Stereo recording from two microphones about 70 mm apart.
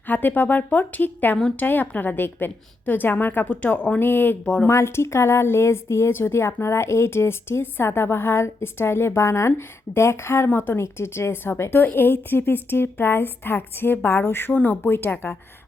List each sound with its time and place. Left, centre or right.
0.1 s a woman's voice: left
4.0 s a woman's voice: left
4.7 s a woman's voice: left
15.1 s a woman's voice: centre